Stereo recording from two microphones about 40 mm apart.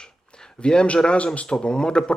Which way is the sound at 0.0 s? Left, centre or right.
Centre.